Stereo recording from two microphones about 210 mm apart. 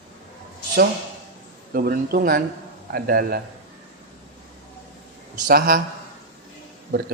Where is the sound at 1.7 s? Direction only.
45° right (ahead or behind).